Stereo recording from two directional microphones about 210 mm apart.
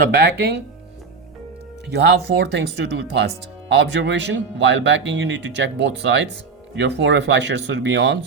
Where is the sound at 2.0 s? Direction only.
55° right (ahead or behind).